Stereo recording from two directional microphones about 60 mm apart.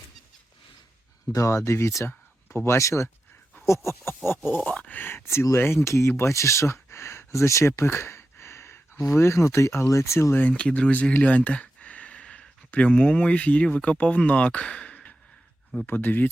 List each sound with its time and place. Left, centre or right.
1.3 s speech: left
4.6 s speech: centre
4.9 s speech: left
7.8 s a sound: left
9.0 s speech: left
10.6 s speech: centre
15.9 s speech: left